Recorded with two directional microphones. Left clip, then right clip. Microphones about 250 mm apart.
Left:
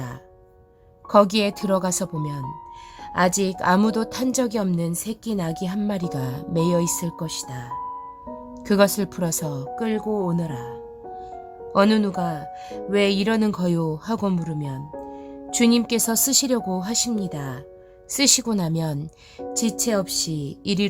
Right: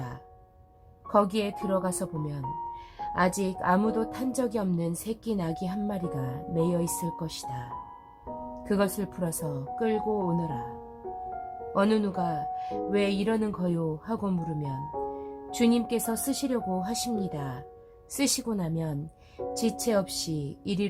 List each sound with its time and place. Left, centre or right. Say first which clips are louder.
1.1 s a woman's voice: left 8 dB; left
8.6 s a woman's voice: left 10 dB; left
11.7 s a woman's voice: left 7 dB; left
19.5 s a woman's voice: left 4 dB; left